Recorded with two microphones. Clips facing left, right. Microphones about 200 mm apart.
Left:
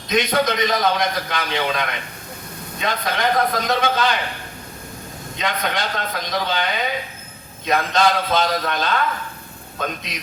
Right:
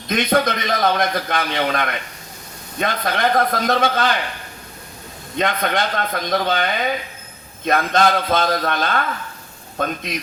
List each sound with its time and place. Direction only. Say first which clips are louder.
0.1 s a man's voice: right 1 dB; 50° right (ahead or behind)
5.4 s a man's voice: right 4 dB; 50° right (ahead or behind)